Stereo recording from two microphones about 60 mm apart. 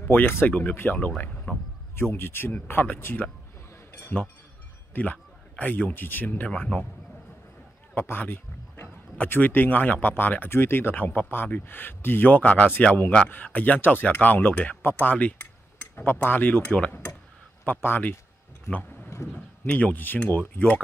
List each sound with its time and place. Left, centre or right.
0.0 s speech: left
2.0 s speech: left
7.9 s a man's voice: left
14.8 s a sound: left
16.1 s speech: left
18.7 s a sound: left
19.6 s speech: left